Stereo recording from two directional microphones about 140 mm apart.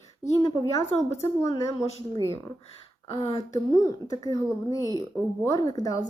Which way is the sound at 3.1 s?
35° left (ahead or behind).